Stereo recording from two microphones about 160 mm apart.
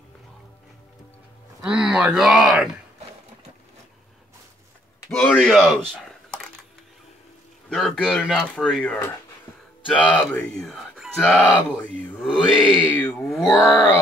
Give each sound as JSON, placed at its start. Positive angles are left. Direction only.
{"t": 1.6, "sound": "speech", "side_deg": -5}
{"t": 5.1, "sound": "speech", "side_deg": 5}
{"t": 7.7, "sound": "speech", "side_deg": 5}
{"t": 10.1, "sound": "speech", "side_deg": 5}
{"t": 12.2, "sound": "speech", "side_deg": -5}
{"t": 12.7, "sound": "speech", "side_deg": 10}
{"t": 13.3, "sound": "speech", "side_deg": 0}
{"t": 13.6, "sound": "speech", "side_deg": 20}